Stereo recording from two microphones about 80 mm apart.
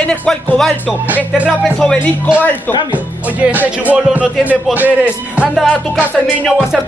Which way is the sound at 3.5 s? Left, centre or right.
Right.